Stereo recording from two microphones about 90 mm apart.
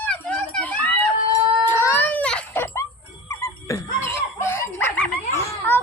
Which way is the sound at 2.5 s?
25° left (ahead or behind).